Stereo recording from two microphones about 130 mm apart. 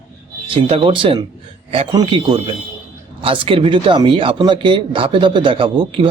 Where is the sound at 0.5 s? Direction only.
45° right (ahead or behind).